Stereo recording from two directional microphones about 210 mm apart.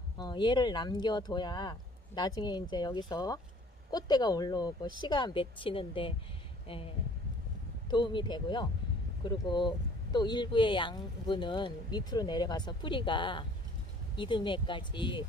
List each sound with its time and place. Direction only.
0.2 s speech: 20° left (ahead or behind)
7.9 s speech: 20° left (ahead or behind)